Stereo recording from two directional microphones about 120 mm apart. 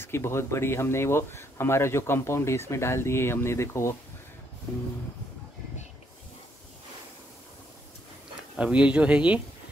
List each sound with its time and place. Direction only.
0.0 s speech: 20° left (ahead or behind)
8.5 s speech: 10° right (ahead or behind)